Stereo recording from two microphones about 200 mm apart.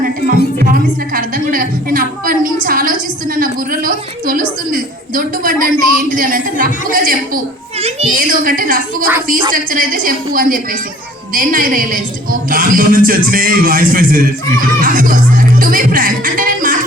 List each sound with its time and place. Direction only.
0.0 s a woman's voice: 45° right (ahead or behind)